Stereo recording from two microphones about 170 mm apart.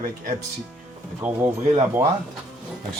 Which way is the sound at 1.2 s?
15° right (ahead or behind).